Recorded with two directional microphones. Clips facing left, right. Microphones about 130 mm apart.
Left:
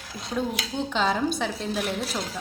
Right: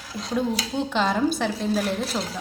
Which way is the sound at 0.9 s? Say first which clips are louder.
Right 2 dB; centre (ahead or behind).